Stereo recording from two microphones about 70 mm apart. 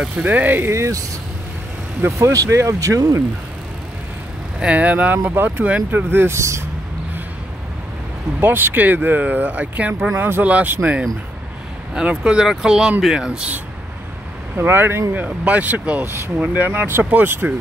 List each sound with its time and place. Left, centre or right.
0.2 s speech: right
0.7 s speech: right
2.5 s speech: right
4.6 s speech: centre
6.1 s speech: right
8.4 s speech: right
10.4 s speech: centre
11.9 s speech: centre
14.6 s speech: right